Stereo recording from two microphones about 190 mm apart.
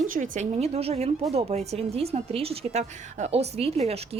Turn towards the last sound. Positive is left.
turn(degrees=-30)  # may be behind; listen again after turning